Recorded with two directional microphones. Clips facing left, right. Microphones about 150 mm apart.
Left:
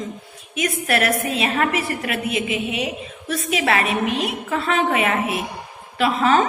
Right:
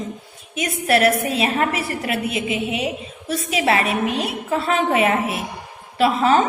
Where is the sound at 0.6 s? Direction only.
30° right (ahead or behind).